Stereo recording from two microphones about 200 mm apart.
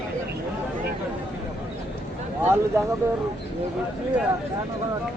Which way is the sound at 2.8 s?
15° right (ahead or behind).